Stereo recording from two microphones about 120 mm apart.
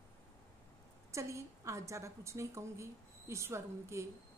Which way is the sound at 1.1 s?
25° right (ahead or behind).